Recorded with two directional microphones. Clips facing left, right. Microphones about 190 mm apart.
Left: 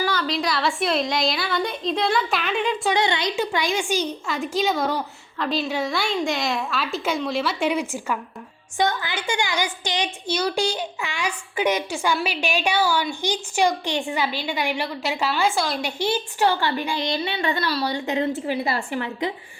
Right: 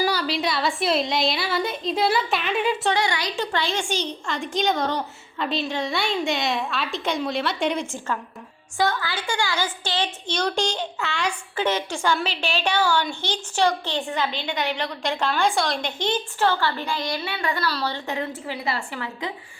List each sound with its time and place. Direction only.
0.3 s a woman's voice: centre (ahead or behind)
2.9 s a woman's voice: 20° left (ahead or behind)
3.3 s a woman's voice: 10° left (ahead or behind)
17.7 s a woman's voice: 10° left (ahead or behind)
18.7 s a woman's voice: 30° left (ahead or behind)